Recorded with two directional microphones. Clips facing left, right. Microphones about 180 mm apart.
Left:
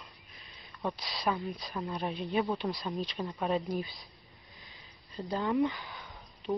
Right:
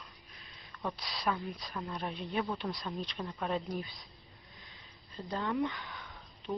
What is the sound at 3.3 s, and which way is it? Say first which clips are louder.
Speech: left 4 dB; 15° left (ahead or behind).